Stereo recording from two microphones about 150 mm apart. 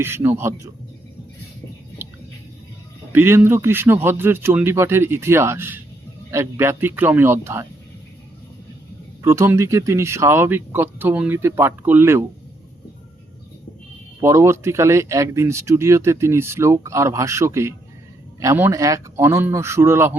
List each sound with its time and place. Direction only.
0.0 s speech: 15° right (ahead or behind)
3.1 s speech: 15° right (ahead or behind)
9.2 s speech: 20° right (ahead or behind)
14.2 s speech: 20° right (ahead or behind)